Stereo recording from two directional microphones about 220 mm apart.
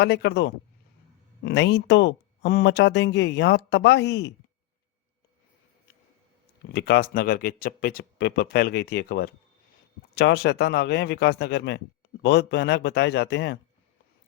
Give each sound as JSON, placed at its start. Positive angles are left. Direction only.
{"t": 0.0, "sound": "speech", "side_deg": 50}
{"t": 6.7, "sound": "speech", "side_deg": 45}